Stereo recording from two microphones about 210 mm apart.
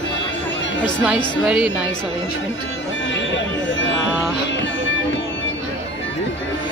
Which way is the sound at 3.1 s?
60° left (ahead or behind).